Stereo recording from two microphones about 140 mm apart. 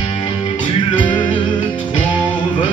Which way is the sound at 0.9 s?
35° left (ahead or behind).